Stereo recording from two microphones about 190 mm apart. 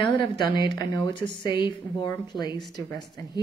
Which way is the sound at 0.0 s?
25° left (ahead or behind).